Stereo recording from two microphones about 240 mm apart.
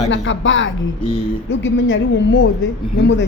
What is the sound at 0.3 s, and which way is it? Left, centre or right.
Speech, left.